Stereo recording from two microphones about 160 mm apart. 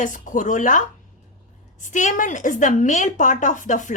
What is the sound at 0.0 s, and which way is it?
A woman's voice, 55° left (ahead or behind).